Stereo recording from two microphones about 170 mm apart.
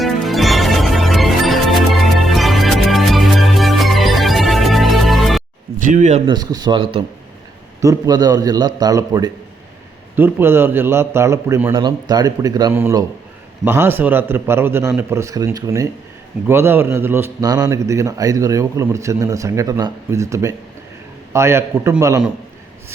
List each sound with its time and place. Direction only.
0.0 s music: centre (ahead or behind)
5.8 s speech: 50° right (ahead or behind)
6.2 s a man's voice: 25° right (ahead or behind)